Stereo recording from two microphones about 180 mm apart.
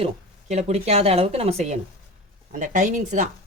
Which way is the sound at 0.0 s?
35° right (ahead or behind).